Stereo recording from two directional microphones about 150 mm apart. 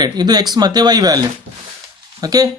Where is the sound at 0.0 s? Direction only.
25° right (ahead or behind).